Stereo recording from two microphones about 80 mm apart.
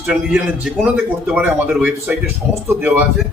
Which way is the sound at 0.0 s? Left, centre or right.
Centre.